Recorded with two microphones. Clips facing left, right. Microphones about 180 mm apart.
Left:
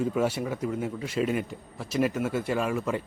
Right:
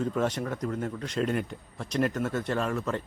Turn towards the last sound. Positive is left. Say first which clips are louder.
# left 2 dB
turn(degrees=10)  # may be behind; listen again after turning